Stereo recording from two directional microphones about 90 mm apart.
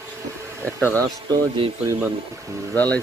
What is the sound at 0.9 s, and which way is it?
Speech, 45° right (ahead or behind).